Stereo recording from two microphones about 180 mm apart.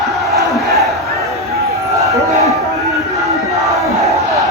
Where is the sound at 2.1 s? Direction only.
20° left (ahead or behind).